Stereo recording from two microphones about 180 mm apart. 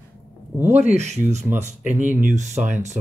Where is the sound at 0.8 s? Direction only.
40° right (ahead or behind).